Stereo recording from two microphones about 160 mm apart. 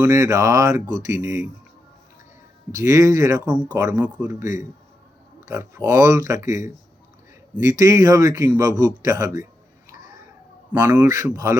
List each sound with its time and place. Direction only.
0.0 s speech: 20° right (ahead or behind)
2.7 s speech: 20° right (ahead or behind)
9.9 s cat: 20° right (ahead or behind)
10.7 s speech: 10° right (ahead or behind)